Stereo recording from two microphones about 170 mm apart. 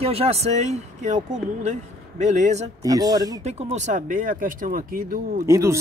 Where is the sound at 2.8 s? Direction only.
20° right (ahead or behind).